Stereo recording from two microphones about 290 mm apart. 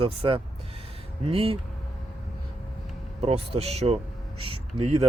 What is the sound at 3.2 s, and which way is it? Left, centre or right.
Speech, centre.